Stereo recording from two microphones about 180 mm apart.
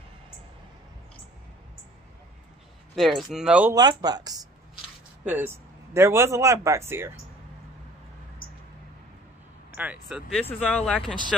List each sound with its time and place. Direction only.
3.0 s speech: centre (ahead or behind)
3.7 s speech: 20° right (ahead or behind)
5.2 s speech: 10° right (ahead or behind)
9.8 s speech: 5° right (ahead or behind)
10.7 s speech: 5° left (ahead or behind)